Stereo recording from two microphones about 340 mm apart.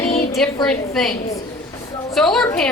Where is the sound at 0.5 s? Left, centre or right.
Centre.